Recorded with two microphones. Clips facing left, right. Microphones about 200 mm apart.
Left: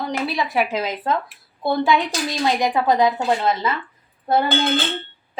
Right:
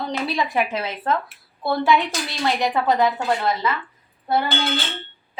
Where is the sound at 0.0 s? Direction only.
5° left (ahead or behind).